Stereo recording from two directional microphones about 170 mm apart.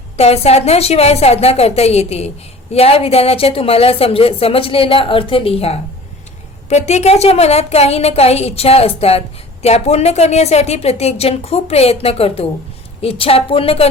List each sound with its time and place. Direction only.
0.2 s a woman's voice: 35° left (ahead or behind)